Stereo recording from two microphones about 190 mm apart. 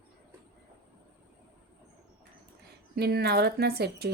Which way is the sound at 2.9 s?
55° right (ahead or behind).